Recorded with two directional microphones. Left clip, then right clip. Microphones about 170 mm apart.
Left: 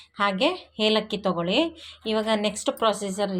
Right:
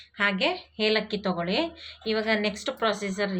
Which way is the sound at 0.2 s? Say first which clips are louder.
Left 2 dB; 45° left (ahead or behind).